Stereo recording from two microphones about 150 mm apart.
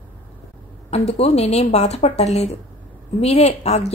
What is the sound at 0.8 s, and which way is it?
A woman's voice, 45° left (ahead or behind).